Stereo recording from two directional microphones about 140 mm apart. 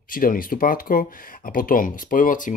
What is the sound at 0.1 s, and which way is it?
Speech, 90° left.